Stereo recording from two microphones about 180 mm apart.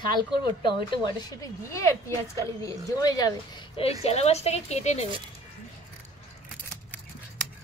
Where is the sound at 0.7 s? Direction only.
20° left (ahead or behind).